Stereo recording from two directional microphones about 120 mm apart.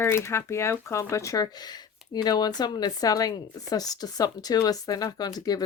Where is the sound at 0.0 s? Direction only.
20° left (ahead or behind).